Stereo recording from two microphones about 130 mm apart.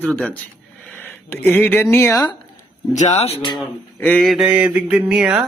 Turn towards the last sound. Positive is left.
turn(degrees=-5)  # may be behind; listen again after turning